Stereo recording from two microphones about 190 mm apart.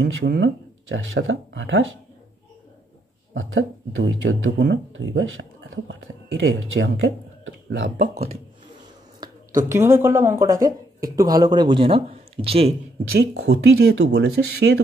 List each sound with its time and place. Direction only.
0.0 s speech: 65° right (ahead or behind)
3.3 s speech: 80° right
9.2 s a sound: 20° right (ahead or behind)
9.7 s speech: 15° right (ahead or behind); by 12.7 s 30° right (ahead or behind)
13.2 s speech: 55° right (ahead or behind); by 14.7 s 75° right (ahead or behind)